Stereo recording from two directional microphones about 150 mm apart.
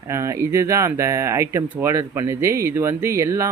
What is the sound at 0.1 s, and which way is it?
Speech, 20° right (ahead or behind).